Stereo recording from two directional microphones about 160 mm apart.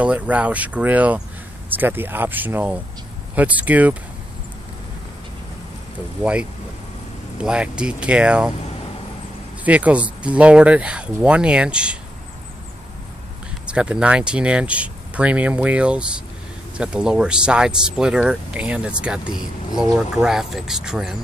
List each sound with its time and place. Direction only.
0.0 s speech: 10° right (ahead or behind)
7.3 s speech: 5° right (ahead or behind)
9.7 s speech: 10° right (ahead or behind)
13.7 s speech: 5° right (ahead or behind)